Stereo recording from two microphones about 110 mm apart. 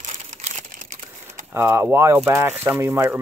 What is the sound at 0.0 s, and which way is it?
Crumpling, 90° right.